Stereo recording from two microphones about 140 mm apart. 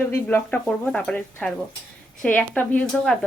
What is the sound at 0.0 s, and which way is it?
A woman's voice, 15° left (ahead or behind).